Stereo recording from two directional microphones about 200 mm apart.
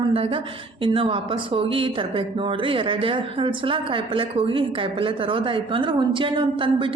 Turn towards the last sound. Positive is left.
turn(degrees=-25)  # may be behind; listen again after turning